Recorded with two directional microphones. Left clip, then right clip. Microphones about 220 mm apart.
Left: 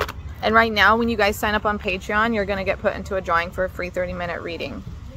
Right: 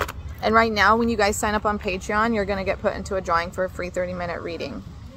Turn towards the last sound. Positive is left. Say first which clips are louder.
# left 1 dB
turn(degrees=-10)  # may be behind; listen again after turning